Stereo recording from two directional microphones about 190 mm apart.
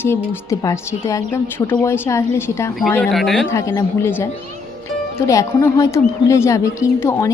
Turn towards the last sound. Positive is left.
turn(degrees=15)  # may be behind; listen again after turning